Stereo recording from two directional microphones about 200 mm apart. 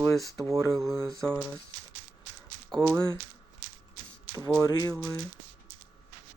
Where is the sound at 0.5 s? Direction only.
15° right (ahead or behind).